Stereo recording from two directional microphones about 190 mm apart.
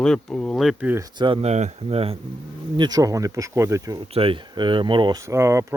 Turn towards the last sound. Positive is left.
turn(degrees=-15)  # may be behind; listen again after turning